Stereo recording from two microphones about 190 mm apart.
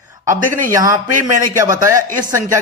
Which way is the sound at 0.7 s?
15° right (ahead or behind).